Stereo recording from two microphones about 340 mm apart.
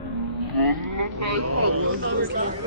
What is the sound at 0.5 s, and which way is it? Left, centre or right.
Vehicle, right.